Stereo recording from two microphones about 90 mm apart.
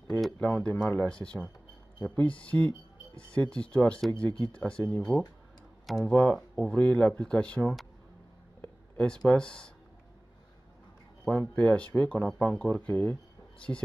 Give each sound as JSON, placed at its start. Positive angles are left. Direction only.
{"t": 0.4, "sound": "speech", "side_deg": 15}
{"t": 6.0, "sound": "speech", "side_deg": 15}
{"t": 8.5, "sound": "a sound", "side_deg": 15}
{"t": 11.2, "sound": "speech", "side_deg": 15}